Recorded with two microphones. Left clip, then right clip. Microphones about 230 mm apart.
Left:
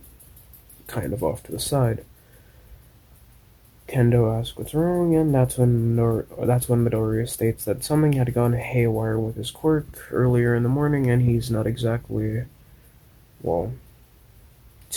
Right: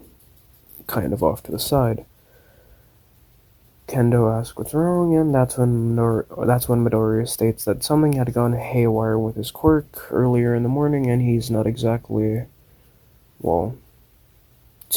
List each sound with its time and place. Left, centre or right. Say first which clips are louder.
0.9 s speech: right 5 dB; right
3.8 s speech: right 2 dB; centre
5.6 s speech: right 2 dB; centre; by 12.5 s right